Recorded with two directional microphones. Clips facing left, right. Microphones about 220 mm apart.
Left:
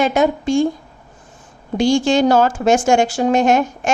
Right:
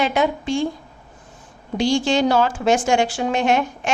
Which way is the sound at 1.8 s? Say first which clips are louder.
Left 4 dB; 45° left (ahead or behind).